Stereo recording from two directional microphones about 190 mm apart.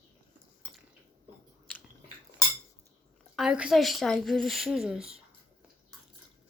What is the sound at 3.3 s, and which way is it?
A woman's voice, 5° right (ahead or behind).